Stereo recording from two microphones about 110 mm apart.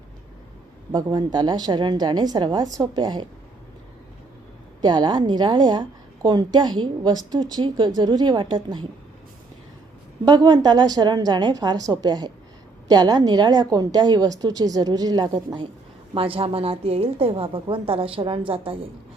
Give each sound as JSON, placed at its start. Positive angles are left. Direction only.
{"t": 0.9, "sound": "a woman's voice", "side_deg": -45}
{"t": 4.8, "sound": "a woman's voice", "side_deg": -40}
{"t": 10.2, "sound": "a woman's voice", "side_deg": -40}
{"t": 16.1, "sound": "a woman's voice", "side_deg": -55}